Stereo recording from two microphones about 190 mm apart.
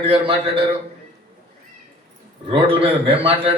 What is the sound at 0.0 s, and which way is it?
Speech, 30° right (ahead or behind).